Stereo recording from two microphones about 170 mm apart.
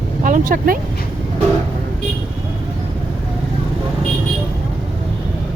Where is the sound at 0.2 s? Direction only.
50° right (ahead or behind).